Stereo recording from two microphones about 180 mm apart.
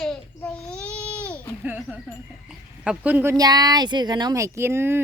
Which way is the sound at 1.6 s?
10° right (ahead or behind).